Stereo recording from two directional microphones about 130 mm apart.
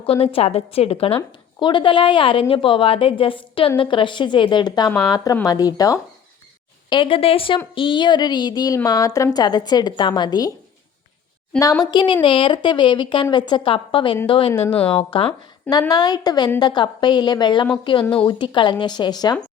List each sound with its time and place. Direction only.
0.0 s a woman's voice: 45° left (ahead or behind); by 6.0 s 30° left (ahead or behind)
6.9 s a woman's voice: 40° left (ahead or behind)
11.6 s a woman's voice: 30° left (ahead or behind)
14.8 s speech: 10° left (ahead or behind)
15.9 s a woman's voice: 30° left (ahead or behind)